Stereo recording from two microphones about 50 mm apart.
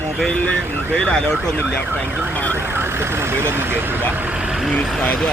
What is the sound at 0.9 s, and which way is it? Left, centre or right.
Speech, centre.